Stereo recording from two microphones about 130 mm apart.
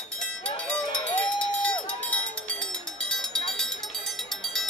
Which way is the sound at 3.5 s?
5° left (ahead or behind).